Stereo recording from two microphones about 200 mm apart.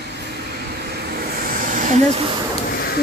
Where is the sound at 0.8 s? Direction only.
50° right (ahead or behind); by 2.3 s 30° right (ahead or behind).